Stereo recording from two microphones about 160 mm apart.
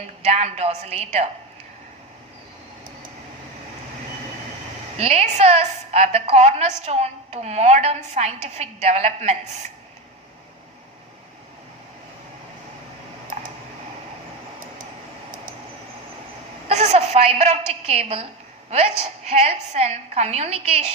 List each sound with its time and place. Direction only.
0.3 s a woman's voice: 45° right (ahead or behind)
4.9 s a woman's voice: 45° right (ahead or behind)
16.6 s a sound: 45° right (ahead or behind)
17.7 s a woman's voice: 40° right (ahead or behind)